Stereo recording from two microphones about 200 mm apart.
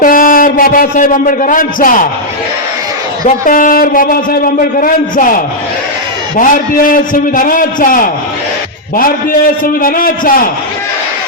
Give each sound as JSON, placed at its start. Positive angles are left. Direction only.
{"t": 0.0, "sound": "a man's voice", "side_deg": 45}
{"t": 3.2, "sound": "a man's voice", "side_deg": 40}
{"t": 6.3, "sound": "a man's voice", "side_deg": 40}
{"t": 9.8, "sound": "a man's voice", "side_deg": 45}